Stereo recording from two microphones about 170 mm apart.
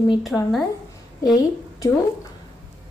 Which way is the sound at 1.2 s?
20° left (ahead or behind).